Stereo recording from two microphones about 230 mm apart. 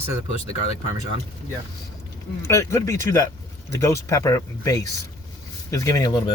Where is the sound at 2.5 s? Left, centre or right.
Centre.